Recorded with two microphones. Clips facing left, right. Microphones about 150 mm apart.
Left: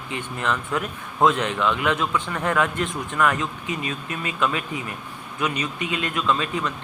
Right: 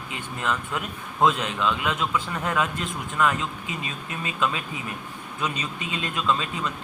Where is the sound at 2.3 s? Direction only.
20° right (ahead or behind).